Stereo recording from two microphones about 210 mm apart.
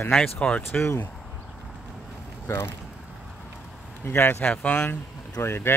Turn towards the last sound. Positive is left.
turn(degrees=10)  # may be behind; listen again after turning